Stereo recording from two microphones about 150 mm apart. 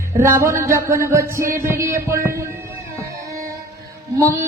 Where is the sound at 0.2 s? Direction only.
20° right (ahead or behind).